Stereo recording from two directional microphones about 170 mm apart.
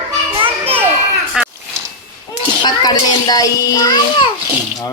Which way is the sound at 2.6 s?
25° left (ahead or behind).